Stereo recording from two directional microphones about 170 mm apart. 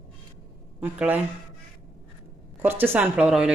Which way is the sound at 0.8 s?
10° right (ahead or behind).